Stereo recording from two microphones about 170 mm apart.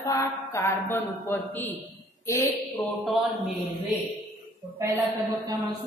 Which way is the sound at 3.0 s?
Centre (ahead or behind).